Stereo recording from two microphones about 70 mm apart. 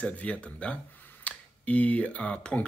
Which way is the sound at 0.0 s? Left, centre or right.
Centre.